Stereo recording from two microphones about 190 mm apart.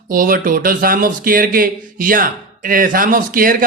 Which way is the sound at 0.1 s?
45° right (ahead or behind).